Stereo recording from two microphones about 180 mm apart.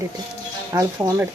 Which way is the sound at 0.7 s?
15° right (ahead or behind).